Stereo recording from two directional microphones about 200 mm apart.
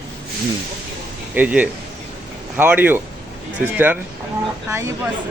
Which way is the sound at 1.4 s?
10° right (ahead or behind).